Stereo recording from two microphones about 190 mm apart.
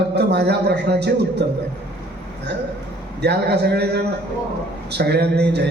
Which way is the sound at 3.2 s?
60° right (ahead or behind).